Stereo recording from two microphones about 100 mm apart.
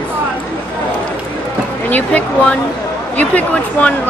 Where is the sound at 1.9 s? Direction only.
15° left (ahead or behind).